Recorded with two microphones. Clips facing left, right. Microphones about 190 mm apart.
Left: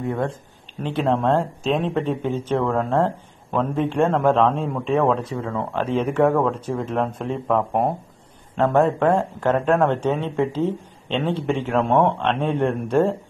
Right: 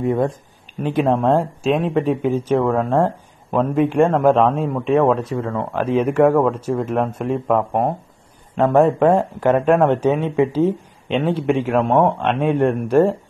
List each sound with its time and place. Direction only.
0.0 s speech: 15° right (ahead or behind)
8.8 s speech: 25° right (ahead or behind)
9.4 s speech: 10° right (ahead or behind)